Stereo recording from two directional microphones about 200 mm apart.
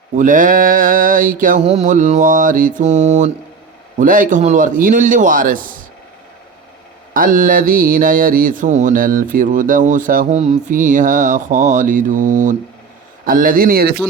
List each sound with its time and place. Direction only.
0.2 s speech: 40° right (ahead or behind)
7.1 s a man's voice: 40° right (ahead or behind)